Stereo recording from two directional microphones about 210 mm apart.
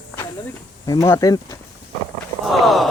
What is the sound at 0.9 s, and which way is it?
Speech, 15° left (ahead or behind).